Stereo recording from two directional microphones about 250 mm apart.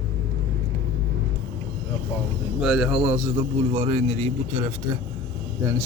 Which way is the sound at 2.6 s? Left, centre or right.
Centre.